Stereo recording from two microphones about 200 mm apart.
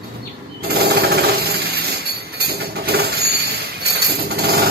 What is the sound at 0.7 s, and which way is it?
Jackhammer, 50° right (ahead or behind).